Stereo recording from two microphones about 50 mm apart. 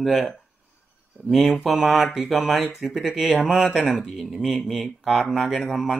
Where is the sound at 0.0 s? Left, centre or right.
Centre.